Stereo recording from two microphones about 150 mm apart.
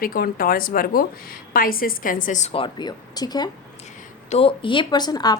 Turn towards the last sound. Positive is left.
turn(degrees=25)  # may be behind; listen again after turning